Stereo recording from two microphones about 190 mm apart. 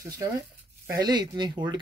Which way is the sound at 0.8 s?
20° right (ahead or behind).